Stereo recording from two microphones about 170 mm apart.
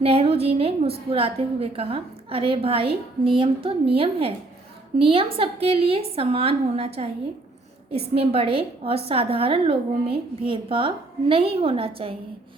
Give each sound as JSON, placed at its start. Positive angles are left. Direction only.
{"t": 0.0, "sound": "a woman's voice", "side_deg": -35}